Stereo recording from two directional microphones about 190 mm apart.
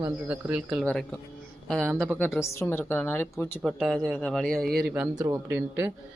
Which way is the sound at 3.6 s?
Centre (ahead or behind).